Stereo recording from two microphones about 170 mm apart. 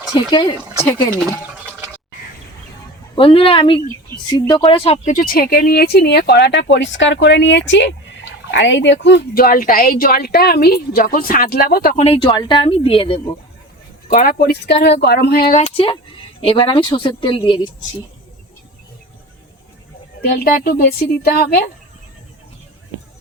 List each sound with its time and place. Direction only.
0.1 s speech: 25° left (ahead or behind)
3.2 s speech: 30° left (ahead or behind)
3.8 s speech: 25° right (ahead or behind)
4.3 s speech: 25° left (ahead or behind)
5.0 s speech: 55° left (ahead or behind)
12.0 s speech: 30° left (ahead or behind)
14.1 s speech: 55° left (ahead or behind)
15.5 s speech: 40° left (ahead or behind)
20.2 s speech: 60° left (ahead or behind)